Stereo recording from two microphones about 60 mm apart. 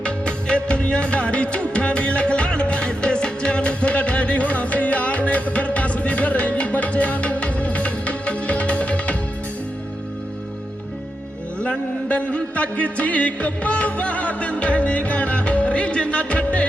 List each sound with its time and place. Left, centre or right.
0.0 s music: centre
11.6 s music: left